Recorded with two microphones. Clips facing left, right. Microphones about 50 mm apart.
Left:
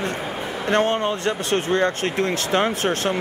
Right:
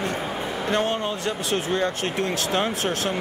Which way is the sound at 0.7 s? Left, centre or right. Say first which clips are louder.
Left 5 dB; left.